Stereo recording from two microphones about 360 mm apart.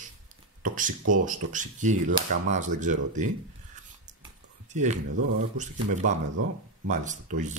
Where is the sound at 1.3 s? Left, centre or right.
Right.